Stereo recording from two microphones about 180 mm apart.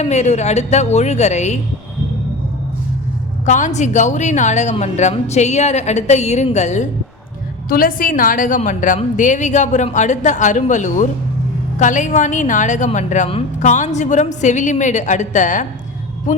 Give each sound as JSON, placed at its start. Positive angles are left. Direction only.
{"t": 0.0, "sound": "a woman's voice", "side_deg": 40}
{"t": 3.4, "sound": "a woman's voice", "side_deg": 45}
{"t": 7.7, "sound": "a woman's voice", "side_deg": 50}